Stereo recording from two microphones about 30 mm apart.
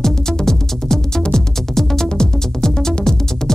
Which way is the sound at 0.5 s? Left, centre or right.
Centre.